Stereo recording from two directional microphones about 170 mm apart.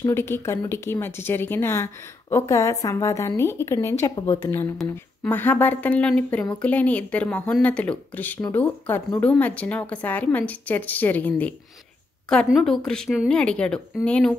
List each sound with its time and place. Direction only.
0.0 s a woman's voice: 15° left (ahead or behind)